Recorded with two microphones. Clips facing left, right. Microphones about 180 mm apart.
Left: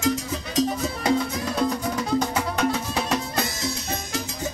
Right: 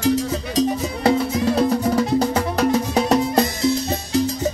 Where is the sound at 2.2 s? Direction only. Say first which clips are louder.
Right 5 dB; 35° right (ahead or behind).